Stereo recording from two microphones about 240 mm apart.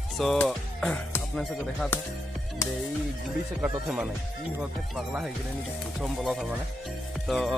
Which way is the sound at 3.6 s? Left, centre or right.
Centre.